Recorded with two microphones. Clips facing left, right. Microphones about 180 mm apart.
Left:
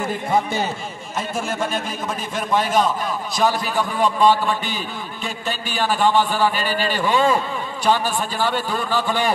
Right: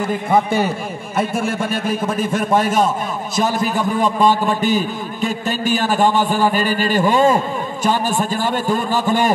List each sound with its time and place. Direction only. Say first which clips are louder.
0.3 s a man's voice: right 5 dB; 55° right (ahead or behind)